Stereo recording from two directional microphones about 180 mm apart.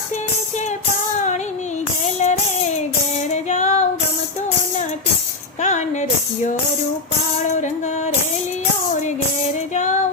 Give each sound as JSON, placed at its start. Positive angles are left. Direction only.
{"t": 2.0, "sound": "music", "side_deg": 40}
{"t": 3.2, "sound": "female singing", "side_deg": 40}
{"t": 5.6, "sound": "speech", "side_deg": 40}
{"t": 9.7, "sound": "music", "side_deg": 40}